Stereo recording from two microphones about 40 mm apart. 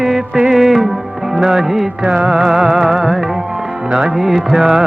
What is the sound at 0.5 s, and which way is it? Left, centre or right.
Music, centre.